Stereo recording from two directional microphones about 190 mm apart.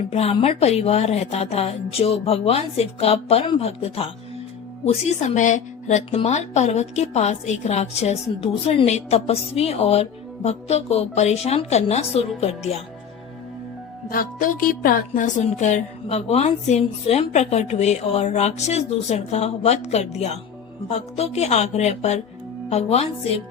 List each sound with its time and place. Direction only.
0.1 s speech: 30° left (ahead or behind)
14.1 s speech: 50° left (ahead or behind); by 23.4 s 35° left (ahead or behind)